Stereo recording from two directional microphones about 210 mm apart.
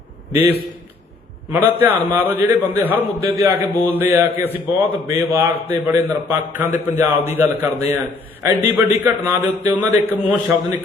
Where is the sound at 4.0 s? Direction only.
10° right (ahead or behind).